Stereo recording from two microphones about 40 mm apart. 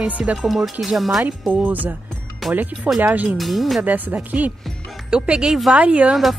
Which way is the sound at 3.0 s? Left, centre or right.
Right.